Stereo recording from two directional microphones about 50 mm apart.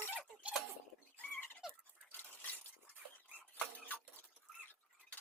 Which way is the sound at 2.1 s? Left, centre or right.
Left.